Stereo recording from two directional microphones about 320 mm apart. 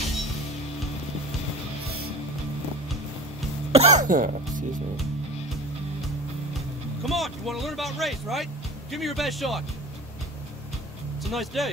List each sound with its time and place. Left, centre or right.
3.7 s cough: right
7.1 s speech: centre
11.2 s speech: centre